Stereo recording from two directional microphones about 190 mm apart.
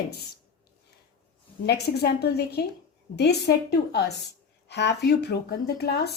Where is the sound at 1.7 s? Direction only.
60° left (ahead or behind).